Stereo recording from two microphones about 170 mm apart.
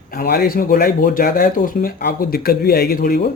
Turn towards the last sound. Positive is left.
turn(degrees=60)  # may be behind; listen again after turning